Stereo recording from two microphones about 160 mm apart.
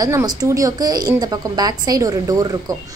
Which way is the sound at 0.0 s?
20° right (ahead or behind).